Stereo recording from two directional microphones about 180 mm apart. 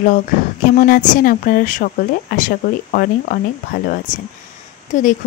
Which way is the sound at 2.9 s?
55° left (ahead or behind).